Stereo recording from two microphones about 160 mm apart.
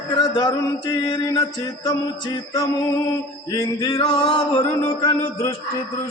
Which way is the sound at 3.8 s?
30° left (ahead or behind).